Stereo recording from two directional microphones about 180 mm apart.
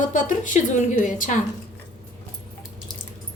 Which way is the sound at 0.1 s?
45° left (ahead or behind).